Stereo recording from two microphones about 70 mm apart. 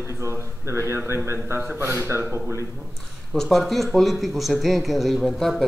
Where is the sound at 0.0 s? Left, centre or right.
Right.